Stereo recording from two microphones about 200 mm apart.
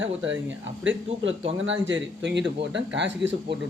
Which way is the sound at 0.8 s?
70° right (ahead or behind).